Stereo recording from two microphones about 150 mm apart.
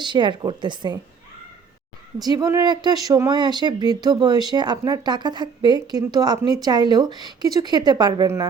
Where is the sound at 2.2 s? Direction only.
25° right (ahead or behind).